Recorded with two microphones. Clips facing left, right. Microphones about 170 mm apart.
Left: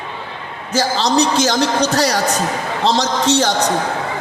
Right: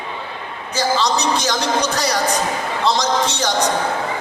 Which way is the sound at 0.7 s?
40° left (ahead or behind).